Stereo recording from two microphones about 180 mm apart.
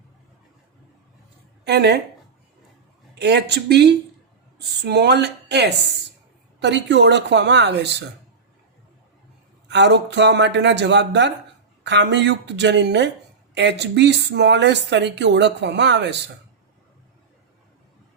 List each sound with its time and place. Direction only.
1.6 s speech: 65° right (ahead or behind)
3.2 s speech: 70° right (ahead or behind)
9.6 s speech: 75° right (ahead or behind)